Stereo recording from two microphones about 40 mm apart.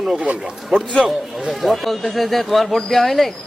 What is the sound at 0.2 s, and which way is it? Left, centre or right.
Speech, right.